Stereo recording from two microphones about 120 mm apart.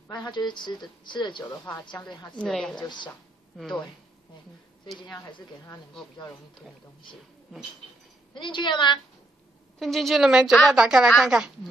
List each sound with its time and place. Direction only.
0.1 s speech: 35° left (ahead or behind)
2.3 s a woman's voice: 5° left (ahead or behind)
2.8 s speech: 40° left (ahead or behind)
3.1 s a woman's voice: 5° left (ahead or behind)
8.4 s speech: 40° left (ahead or behind)
9.8 s a woman's voice: centre (ahead or behind)